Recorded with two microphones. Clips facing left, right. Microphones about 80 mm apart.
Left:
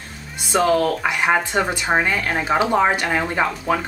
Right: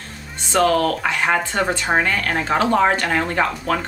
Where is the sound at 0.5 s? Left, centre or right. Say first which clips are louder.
Even; centre.